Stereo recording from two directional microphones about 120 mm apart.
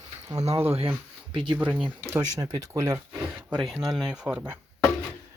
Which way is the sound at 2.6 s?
20° right (ahead or behind).